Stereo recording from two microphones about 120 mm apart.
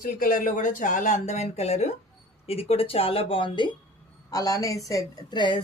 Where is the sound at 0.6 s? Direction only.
90° left; by 3.7 s 45° left (ahead or behind).